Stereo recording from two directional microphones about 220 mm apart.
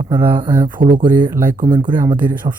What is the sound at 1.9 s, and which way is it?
Speech, 10° right (ahead or behind).